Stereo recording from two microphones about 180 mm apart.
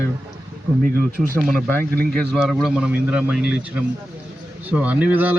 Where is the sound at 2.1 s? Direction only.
Centre (ahead or behind).